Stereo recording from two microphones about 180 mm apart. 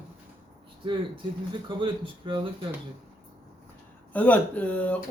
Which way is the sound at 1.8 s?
30° right (ahead or behind).